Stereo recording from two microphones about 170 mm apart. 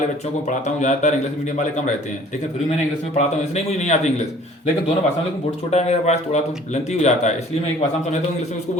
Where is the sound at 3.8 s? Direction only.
40° left (ahead or behind).